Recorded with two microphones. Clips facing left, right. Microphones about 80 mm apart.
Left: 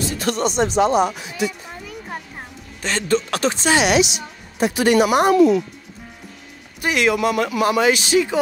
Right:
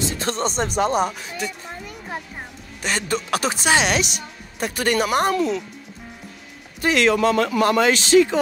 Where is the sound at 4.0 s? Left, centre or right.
Right.